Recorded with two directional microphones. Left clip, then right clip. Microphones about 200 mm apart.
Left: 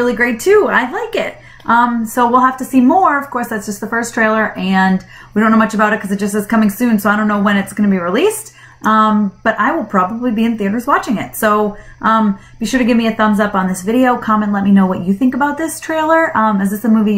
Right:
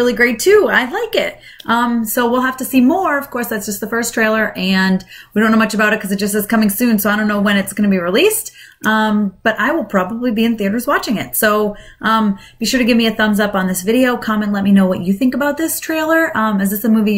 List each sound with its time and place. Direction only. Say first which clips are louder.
0.0 s speech: right 1 dB; 20° right (ahead or behind)